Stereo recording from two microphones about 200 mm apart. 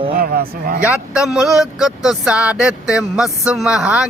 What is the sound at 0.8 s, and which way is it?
Speech, 5° right (ahead or behind).